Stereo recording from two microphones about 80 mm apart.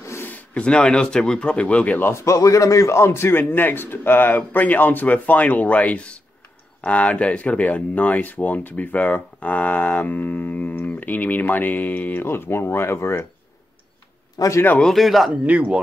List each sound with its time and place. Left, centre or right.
0.0 s a sound: left
0.3 s speech: centre
2.2 s a man's voice: left
14.4 s a man's voice: left
14.8 s speech: centre
15.4 s speech: centre